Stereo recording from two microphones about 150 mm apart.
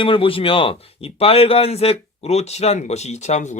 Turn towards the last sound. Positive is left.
turn(degrees=50)  # may be behind; listen again after turning